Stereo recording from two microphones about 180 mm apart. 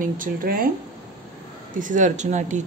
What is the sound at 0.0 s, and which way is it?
Speech, 50° right (ahead or behind).